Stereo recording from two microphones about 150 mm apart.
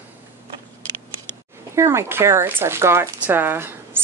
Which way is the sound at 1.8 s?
15° right (ahead or behind).